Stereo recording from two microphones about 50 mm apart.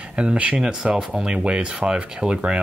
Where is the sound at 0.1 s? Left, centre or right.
Right.